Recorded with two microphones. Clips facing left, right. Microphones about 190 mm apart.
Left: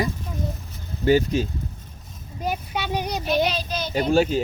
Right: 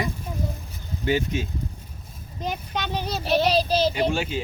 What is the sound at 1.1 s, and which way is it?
Speech, 35° left (ahead or behind).